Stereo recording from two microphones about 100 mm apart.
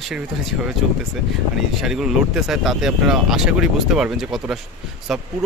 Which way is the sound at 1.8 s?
5° right (ahead or behind).